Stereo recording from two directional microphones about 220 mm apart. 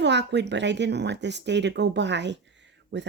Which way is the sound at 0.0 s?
50° right (ahead or behind).